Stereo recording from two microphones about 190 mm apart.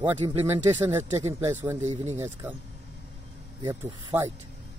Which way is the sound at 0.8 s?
15° right (ahead or behind).